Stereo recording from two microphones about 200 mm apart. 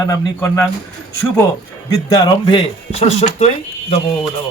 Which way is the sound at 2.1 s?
20° left (ahead or behind).